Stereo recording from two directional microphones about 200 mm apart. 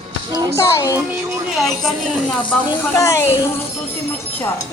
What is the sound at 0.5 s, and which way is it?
Speech, 15° left (ahead or behind).